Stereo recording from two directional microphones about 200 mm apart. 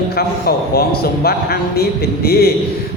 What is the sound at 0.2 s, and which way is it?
Music, 50° left (ahead or behind).